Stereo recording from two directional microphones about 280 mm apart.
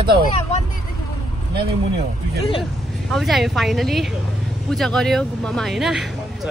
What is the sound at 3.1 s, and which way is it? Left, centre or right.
Speech, centre.